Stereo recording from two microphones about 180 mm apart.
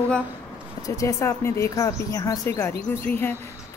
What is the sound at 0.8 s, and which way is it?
Speech, 15° left (ahead or behind).